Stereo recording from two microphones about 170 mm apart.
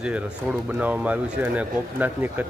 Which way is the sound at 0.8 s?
10° right (ahead or behind).